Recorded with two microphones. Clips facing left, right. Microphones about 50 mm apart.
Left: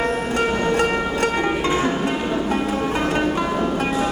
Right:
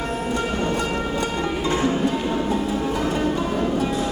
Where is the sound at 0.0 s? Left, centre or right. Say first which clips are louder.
Left 4 dB; left.